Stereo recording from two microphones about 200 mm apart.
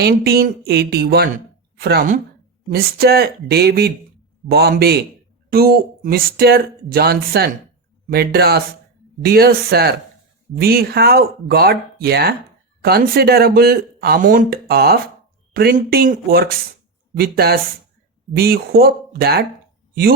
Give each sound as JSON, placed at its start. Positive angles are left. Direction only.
{"t": 0.0, "sound": "speech", "side_deg": -50}